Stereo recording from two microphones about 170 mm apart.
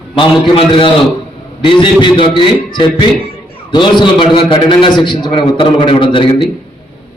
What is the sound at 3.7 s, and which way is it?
A man's voice, 25° left (ahead or behind).